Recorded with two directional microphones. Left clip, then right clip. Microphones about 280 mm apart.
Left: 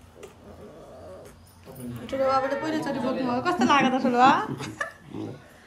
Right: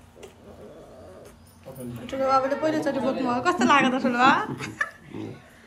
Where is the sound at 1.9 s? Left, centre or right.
Centre.